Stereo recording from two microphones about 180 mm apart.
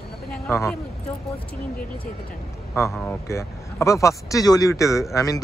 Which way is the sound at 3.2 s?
15° left (ahead or behind).